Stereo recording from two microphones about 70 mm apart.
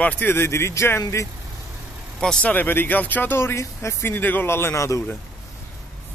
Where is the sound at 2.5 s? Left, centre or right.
Left.